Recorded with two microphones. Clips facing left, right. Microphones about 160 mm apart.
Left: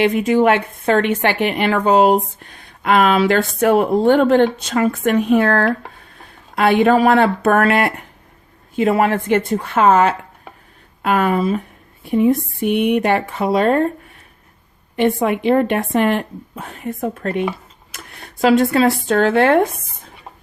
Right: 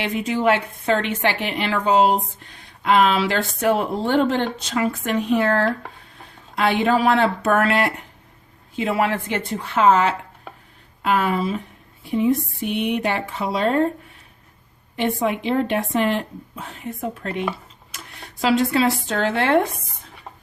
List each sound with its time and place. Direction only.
0.0 s a woman's voice: 55° left (ahead or behind)
14.9 s a woman's voice: 55° left (ahead or behind)